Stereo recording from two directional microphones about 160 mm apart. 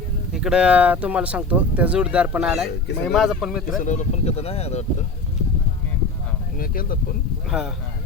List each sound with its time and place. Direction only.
0.3 s speech: 5° right (ahead or behind)
3.8 s speech: 50° left (ahead or behind)
6.6 s speech: 60° left (ahead or behind)
7.5 s speech: 5° right (ahead or behind)